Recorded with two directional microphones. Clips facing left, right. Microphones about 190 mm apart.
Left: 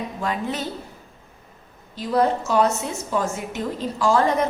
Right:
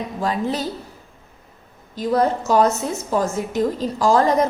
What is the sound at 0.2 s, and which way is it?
Speech, 35° right (ahead or behind).